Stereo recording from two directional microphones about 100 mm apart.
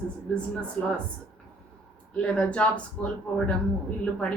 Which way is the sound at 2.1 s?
10° left (ahead or behind).